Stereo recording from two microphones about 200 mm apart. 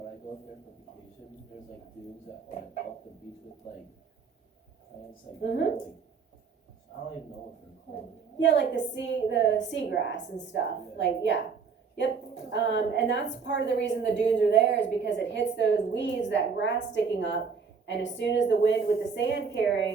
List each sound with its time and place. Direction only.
5.4 s a woman's voice: 60° left (ahead or behind)
8.4 s a woman's voice: 65° left (ahead or behind)